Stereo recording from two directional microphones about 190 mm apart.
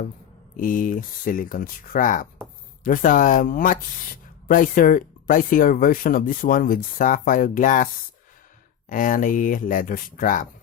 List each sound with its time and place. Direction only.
0.5 s speech: 45° left (ahead or behind)
8.9 s speech: 45° left (ahead or behind)